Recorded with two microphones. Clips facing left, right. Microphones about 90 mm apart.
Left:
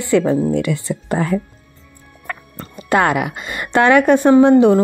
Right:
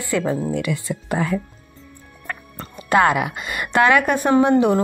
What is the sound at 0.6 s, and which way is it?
Speech, 30° left (ahead or behind).